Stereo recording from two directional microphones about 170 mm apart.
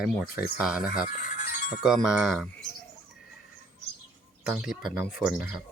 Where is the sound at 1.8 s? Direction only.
Centre (ahead or behind).